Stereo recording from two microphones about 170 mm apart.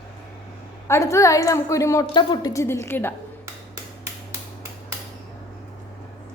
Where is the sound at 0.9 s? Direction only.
15° left (ahead or behind).